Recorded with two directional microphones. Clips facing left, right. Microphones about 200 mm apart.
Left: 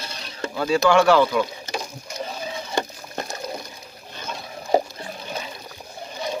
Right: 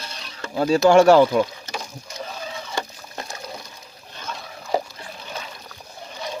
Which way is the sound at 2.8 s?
30° left (ahead or behind).